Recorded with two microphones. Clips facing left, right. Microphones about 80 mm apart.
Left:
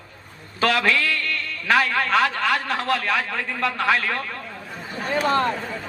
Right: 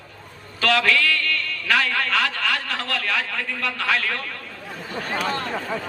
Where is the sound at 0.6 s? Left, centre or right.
Left.